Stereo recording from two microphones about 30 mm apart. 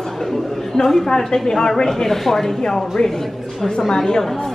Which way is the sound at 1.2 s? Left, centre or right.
Centre.